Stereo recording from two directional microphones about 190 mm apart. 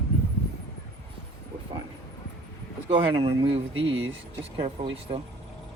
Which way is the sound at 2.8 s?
25° right (ahead or behind).